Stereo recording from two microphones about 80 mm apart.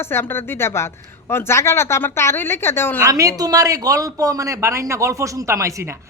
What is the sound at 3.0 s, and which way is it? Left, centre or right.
A man's voice, right.